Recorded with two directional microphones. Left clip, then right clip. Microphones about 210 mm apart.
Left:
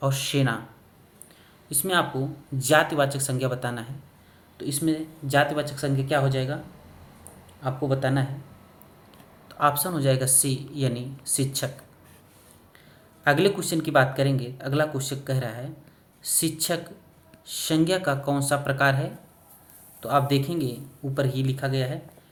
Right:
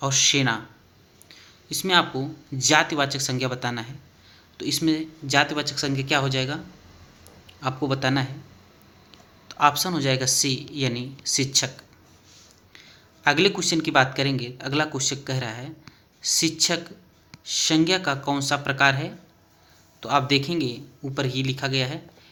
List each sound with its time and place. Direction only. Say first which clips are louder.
0.0 s speech: right 5 dB; 10° right (ahead or behind)
7.9 s speech: right 1 dB; 25° right (ahead or behind)
9.5 s speech: right 3 dB; 10° right (ahead or behind)
13.2 s speech: right 2 dB; 15° right (ahead or behind)